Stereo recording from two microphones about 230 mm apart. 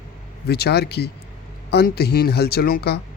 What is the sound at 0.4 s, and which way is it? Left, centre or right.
Speech, left.